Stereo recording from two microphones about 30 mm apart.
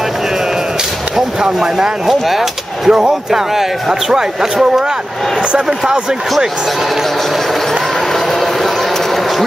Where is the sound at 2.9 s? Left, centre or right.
Right.